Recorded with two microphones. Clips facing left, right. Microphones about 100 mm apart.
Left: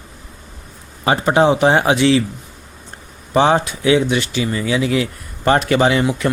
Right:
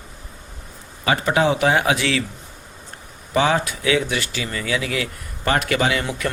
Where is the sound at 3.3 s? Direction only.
30° left (ahead or behind).